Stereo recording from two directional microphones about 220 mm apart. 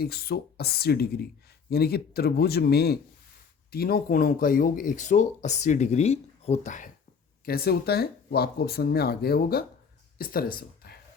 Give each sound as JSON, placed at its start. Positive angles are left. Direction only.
{"t": 0.0, "sound": "speech", "side_deg": 45}